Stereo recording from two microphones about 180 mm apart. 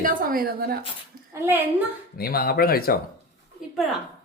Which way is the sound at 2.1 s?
55° left (ahead or behind).